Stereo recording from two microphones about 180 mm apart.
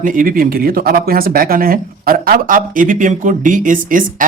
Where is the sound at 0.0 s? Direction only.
50° right (ahead or behind).